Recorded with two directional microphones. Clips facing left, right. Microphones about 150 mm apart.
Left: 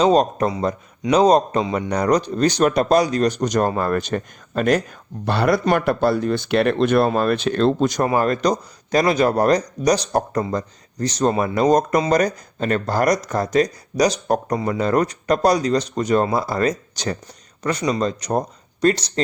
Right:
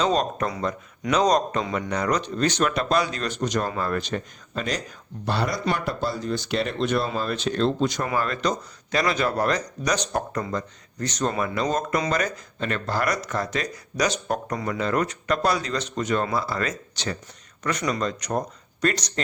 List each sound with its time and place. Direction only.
0.0 s speech: 35° left (ahead or behind)